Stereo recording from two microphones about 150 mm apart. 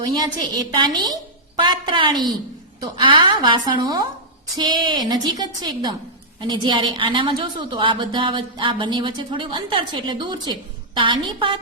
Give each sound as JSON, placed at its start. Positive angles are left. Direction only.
{"t": 0.1, "sound": "a woman's voice", "side_deg": -30}